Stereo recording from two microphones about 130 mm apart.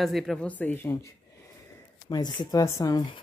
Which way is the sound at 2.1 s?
35° left (ahead or behind).